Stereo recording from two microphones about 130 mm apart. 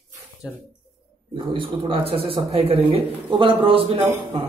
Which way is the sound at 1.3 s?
40° right (ahead or behind).